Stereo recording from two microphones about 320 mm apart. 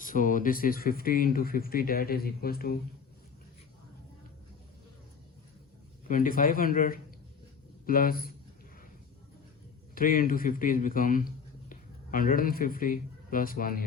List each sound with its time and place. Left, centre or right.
0.0 s speech: left
6.1 s speech: left
9.9 s speech: left